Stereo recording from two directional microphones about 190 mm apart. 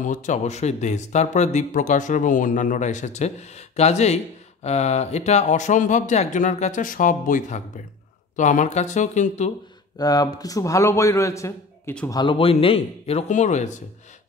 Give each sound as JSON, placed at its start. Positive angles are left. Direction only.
{"t": 0.0, "sound": "speech", "side_deg": 40}
{"t": 9.9, "sound": "a man's voice", "side_deg": 20}
{"t": 12.1, "sound": "speech", "side_deg": 25}